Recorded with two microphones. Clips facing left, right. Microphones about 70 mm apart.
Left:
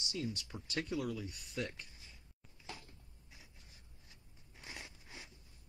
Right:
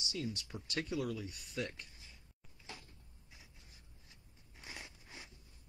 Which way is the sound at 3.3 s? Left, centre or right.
Centre.